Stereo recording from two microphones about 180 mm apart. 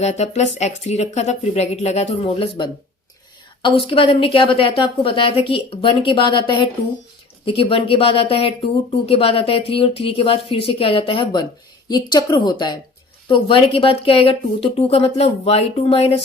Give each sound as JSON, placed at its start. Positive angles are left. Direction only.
{"t": 0.0, "sound": "speech", "side_deg": 40}
{"t": 3.6, "sound": "a woman's voice", "side_deg": 30}